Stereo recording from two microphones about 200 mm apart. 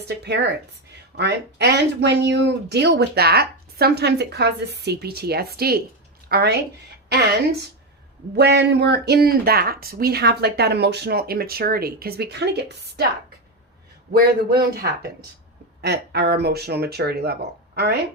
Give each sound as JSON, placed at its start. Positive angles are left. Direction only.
{"t": 0.1, "sound": "speech", "side_deg": -55}
{"t": 8.4, "sound": "speech", "side_deg": -55}
{"t": 14.1, "sound": "speech", "side_deg": -50}